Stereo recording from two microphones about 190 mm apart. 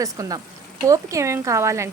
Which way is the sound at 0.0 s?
20° right (ahead or behind).